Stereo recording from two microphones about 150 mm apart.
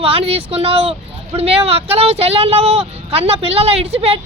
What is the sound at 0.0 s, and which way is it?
Speech, 40° right (ahead or behind).